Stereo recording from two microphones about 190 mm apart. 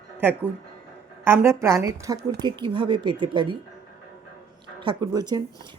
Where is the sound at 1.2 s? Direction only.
15° right (ahead or behind).